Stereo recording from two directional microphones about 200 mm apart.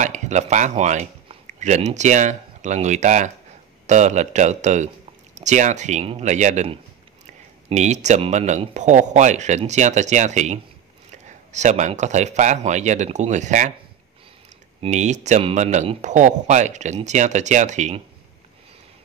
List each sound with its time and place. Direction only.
0.0 s speech: 35° right (ahead or behind)
14.8 s speech: 35° right (ahead or behind)